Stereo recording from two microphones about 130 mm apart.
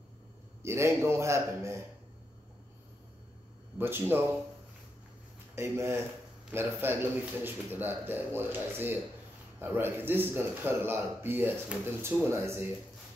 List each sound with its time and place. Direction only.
0.6 s a man's voice: 20° right (ahead or behind)
3.7 s speech: 15° right (ahead or behind)
5.6 s a man's voice: 20° right (ahead or behind)